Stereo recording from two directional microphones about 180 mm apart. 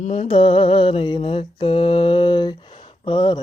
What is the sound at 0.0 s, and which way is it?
Mantra, 35° left (ahead or behind).